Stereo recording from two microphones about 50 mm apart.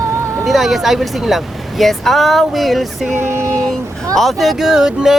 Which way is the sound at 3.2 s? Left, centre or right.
Right.